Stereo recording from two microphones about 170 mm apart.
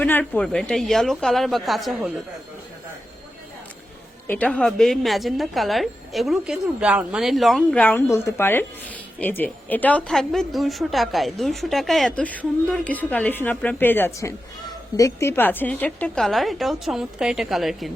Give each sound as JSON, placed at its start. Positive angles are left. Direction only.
{"t": 0.0, "sound": "a woman's voice", "side_deg": 10}
{"t": 4.3, "sound": "a woman's voice", "side_deg": 5}